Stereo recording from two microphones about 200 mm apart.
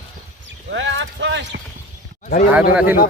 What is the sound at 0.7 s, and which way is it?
Clip-clop, 65° right (ahead or behind).